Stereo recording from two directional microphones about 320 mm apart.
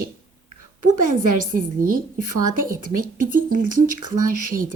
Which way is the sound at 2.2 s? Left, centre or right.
Right.